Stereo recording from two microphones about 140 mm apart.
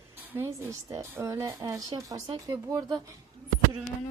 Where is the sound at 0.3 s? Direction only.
20° right (ahead or behind).